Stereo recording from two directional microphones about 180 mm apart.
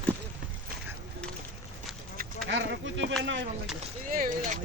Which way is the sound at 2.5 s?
80° right.